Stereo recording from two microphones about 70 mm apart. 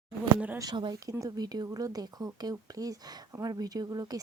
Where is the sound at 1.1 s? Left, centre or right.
Right.